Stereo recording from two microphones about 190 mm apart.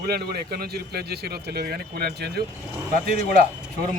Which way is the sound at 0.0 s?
55° right (ahead or behind).